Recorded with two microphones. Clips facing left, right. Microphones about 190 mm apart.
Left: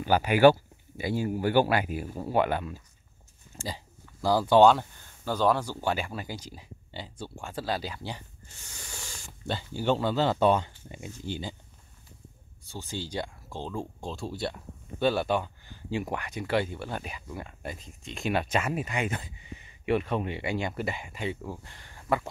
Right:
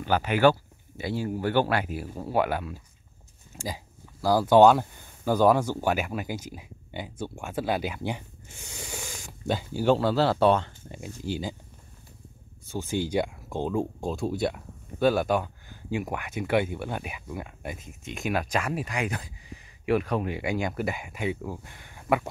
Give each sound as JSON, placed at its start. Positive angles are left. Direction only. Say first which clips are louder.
{"t": 0.0, "sound": "speech", "louder": "left 2 dB", "side_deg": 10}
{"t": 8.6, "sound": "a sound", "louder": "right 7 dB", "side_deg": -15}
{"t": 9.2, "sound": "speech", "louder": "right 5 dB", "side_deg": -10}
{"t": 11.2, "sound": "speech", "louder": "right 4 dB", "side_deg": -5}
{"t": 12.7, "sound": "speech", "louder": "right 8 dB", "side_deg": -15}